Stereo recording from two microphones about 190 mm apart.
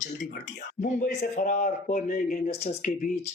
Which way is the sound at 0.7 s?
40° left (ahead or behind).